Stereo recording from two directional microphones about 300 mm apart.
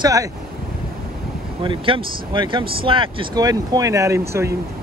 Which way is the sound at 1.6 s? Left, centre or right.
Centre.